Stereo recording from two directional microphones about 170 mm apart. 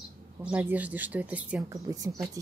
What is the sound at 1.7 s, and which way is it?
Speech, 20° right (ahead or behind).